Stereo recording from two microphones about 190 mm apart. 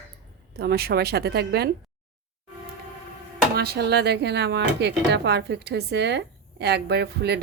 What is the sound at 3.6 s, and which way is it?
A woman's voice, 60° right (ahead or behind).